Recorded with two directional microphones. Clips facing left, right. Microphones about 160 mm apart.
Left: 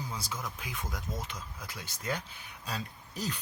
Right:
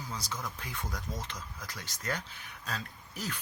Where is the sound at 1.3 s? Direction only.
25° left (ahead or behind).